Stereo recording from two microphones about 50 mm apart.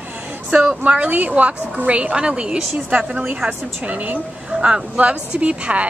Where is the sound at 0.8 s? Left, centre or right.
Right.